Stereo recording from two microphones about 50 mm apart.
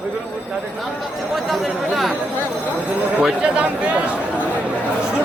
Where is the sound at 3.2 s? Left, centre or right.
Right.